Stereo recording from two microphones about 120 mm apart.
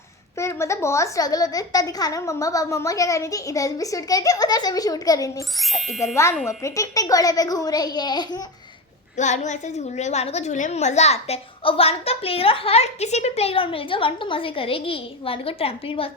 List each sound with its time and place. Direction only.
0.3 s a woman's voice: 25° left (ahead or behind)
5.5 s speech: centre (ahead or behind)
6.6 s a child's voice: 25° left (ahead or behind)
9.1 s a woman's voice: 80° left; by 16.0 s 50° left (ahead or behind)